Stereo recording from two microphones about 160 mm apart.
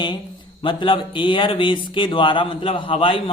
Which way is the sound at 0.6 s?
30° left (ahead or behind).